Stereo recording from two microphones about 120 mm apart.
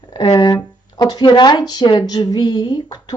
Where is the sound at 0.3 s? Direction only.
35° left (ahead or behind).